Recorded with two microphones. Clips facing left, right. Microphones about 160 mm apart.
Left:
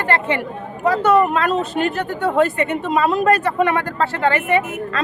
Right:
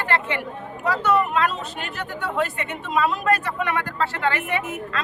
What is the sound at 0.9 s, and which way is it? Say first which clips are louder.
Speech: left 6 dB; 50° left (ahead or behind).